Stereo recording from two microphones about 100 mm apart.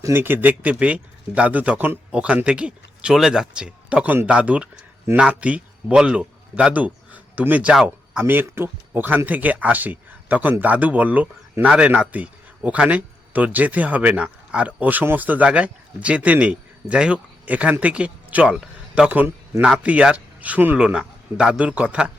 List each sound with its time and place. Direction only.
0.0 s a man's voice: 20° right (ahead or behind)
18.5 s a sound: 5° right (ahead or behind)
19.0 s speech: 15° right (ahead or behind)